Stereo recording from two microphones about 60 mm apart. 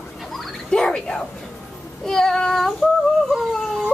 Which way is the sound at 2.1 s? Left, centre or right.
Centre.